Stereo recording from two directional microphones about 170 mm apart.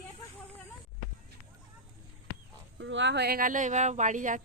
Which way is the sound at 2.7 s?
90° right.